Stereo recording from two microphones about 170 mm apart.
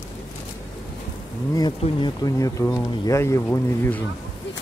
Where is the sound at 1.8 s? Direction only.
25° left (ahead or behind).